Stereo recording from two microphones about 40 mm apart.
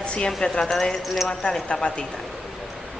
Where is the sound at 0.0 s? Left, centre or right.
Left.